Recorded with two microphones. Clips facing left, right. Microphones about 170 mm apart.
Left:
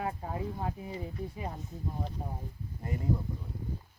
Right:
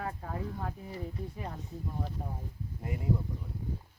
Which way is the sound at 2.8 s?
10° right (ahead or behind).